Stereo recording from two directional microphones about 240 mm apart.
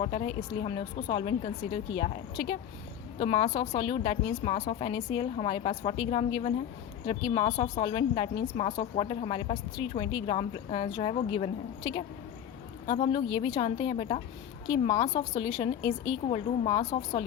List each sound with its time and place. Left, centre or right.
0.0 s a woman's voice: left